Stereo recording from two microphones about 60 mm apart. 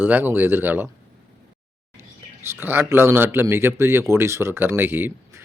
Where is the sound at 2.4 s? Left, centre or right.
Right.